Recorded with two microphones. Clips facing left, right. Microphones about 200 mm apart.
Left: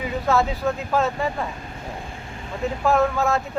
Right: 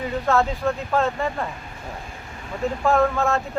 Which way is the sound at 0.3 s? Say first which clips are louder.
Even; centre (ahead or behind).